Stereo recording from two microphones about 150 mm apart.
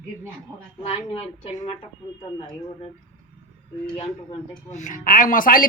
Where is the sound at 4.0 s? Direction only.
45° left (ahead or behind); by 5.7 s 70° left (ahead or behind).